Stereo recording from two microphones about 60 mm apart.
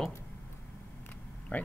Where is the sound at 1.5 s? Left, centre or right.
Left.